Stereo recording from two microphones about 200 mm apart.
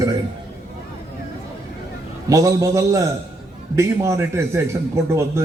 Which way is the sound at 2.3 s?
15° right (ahead or behind).